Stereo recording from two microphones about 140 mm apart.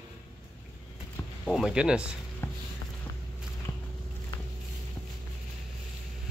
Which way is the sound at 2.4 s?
15° left (ahead or behind).